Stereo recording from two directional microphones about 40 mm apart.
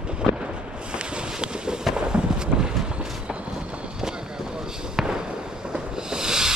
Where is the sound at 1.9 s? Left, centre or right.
Centre.